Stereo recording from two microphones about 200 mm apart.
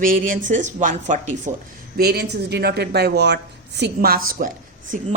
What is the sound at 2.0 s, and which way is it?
Speech, 55° right (ahead or behind).